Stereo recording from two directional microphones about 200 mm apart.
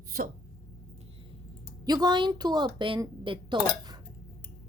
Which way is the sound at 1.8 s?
20° right (ahead or behind).